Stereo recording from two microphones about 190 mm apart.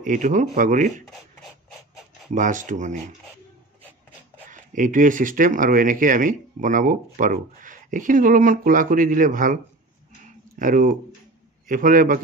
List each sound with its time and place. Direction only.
0.0 s speech: 45° right (ahead or behind)
2.3 s speech: 40° right (ahead or behind)
4.5 s speech: 40° right (ahead or behind)
10.2 s a sound: 45° right (ahead or behind)
11.6 s a man's voice: 45° right (ahead or behind)